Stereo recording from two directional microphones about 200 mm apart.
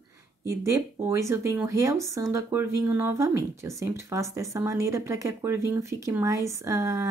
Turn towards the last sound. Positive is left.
turn(degrees=-15)  # may be behind; listen again after turning